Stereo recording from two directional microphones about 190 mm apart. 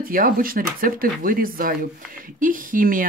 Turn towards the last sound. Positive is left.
turn(degrees=-45)  # may be behind; listen again after turning